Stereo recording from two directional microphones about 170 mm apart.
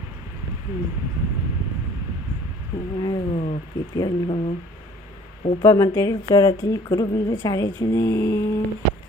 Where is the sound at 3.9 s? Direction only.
25° left (ahead or behind).